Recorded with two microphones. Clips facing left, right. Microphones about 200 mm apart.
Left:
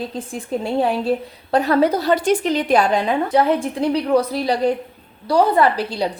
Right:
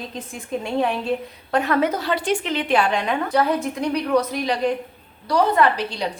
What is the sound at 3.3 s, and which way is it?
A woman's voice, 25° left (ahead or behind).